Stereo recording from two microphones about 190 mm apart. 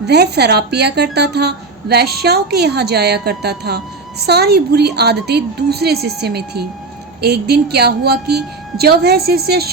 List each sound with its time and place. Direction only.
0.0 s a woman's voice: 60° right (ahead or behind)